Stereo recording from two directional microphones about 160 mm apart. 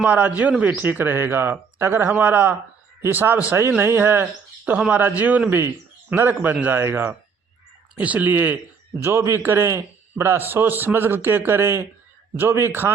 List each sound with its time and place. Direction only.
0.0 s speech: 10° right (ahead or behind)